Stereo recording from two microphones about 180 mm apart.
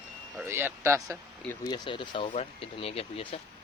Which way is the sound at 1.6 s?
25° left (ahead or behind).